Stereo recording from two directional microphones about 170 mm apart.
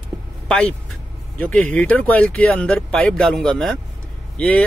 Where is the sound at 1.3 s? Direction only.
5° left (ahead or behind).